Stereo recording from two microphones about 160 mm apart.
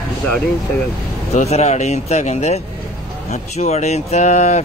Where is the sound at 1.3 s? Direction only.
45° left (ahead or behind).